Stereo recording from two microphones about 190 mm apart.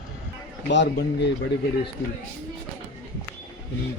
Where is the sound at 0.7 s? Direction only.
65° left (ahead or behind).